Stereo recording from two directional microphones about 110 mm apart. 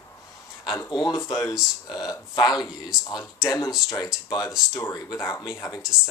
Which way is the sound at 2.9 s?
5° right (ahead or behind).